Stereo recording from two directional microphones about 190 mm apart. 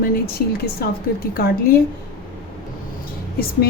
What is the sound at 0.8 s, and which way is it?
Speech, 55° left (ahead or behind).